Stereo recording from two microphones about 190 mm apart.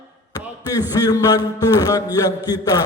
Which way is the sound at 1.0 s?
20° left (ahead or behind).